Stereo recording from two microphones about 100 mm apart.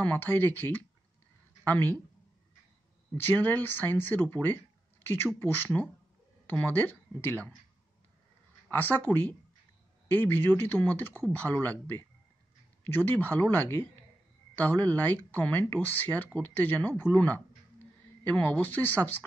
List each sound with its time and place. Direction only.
0.0 s a woman's voice: 20° left (ahead or behind)
3.3 s speech: 20° left (ahead or behind)
8.6 s speech: 20° left (ahead or behind)
12.8 s speech: 20° left (ahead or behind)